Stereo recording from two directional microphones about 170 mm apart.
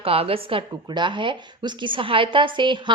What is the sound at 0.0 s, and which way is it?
Speech, 35° right (ahead or behind).